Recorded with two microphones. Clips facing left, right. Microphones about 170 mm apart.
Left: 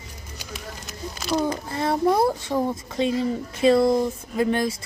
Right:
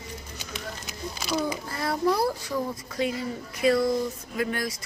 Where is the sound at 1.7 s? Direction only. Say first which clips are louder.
Left 5 dB; 25° left (ahead or behind).